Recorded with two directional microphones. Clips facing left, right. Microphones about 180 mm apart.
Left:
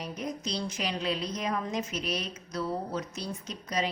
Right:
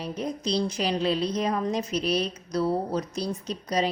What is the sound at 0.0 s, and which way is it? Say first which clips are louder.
A woman's voice: right 5 dB; 30° right (ahead or behind).